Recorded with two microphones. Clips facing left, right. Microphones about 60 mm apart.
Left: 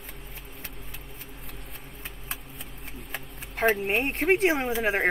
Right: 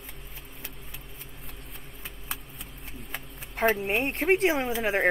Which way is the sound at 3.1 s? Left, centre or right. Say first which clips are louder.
Left 1 dB; centre.